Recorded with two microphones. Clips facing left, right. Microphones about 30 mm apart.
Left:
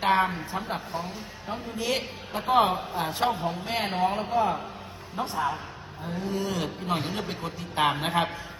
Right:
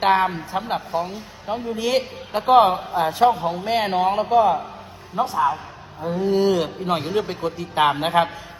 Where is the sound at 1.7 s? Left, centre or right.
Right.